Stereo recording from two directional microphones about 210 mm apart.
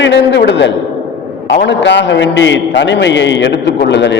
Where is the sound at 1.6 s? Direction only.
60° left (ahead or behind).